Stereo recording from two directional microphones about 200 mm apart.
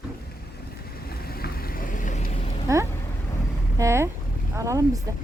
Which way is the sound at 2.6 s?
15° right (ahead or behind).